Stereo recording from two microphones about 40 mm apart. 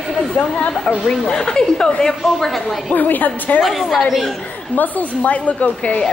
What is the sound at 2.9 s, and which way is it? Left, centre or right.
Speech, left.